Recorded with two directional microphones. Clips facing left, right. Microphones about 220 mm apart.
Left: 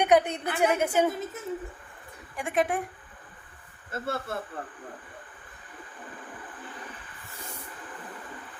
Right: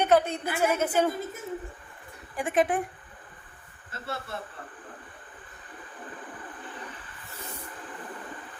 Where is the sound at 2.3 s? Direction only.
Centre (ahead or behind).